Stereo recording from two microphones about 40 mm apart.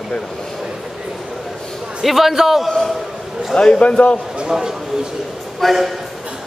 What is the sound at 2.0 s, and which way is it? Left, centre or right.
Speech, centre.